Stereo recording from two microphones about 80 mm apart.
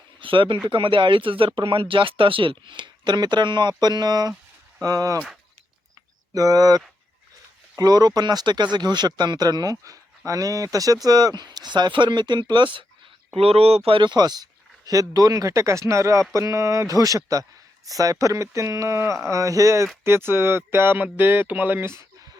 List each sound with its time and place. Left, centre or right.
0.2 s speech: right
6.3 s speech: right
13.9 s speech: right
14.8 s speech: right